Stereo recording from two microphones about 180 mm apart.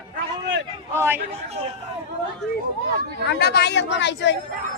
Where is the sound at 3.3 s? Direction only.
65° left (ahead or behind).